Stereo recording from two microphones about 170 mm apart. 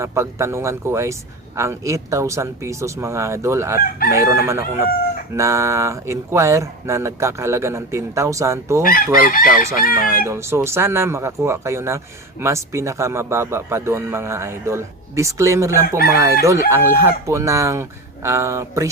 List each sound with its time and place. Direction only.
0.0 s speech: 15° right (ahead or behind)
3.8 s chicken: 60° left (ahead or behind)
4.1 s speech: 20° right (ahead or behind)
8.8 s chicken: 55° left (ahead or behind)
10.2 s speech: 15° right (ahead or behind)